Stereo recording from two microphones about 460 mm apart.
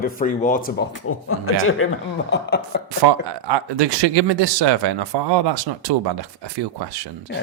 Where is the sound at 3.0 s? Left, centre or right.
Right.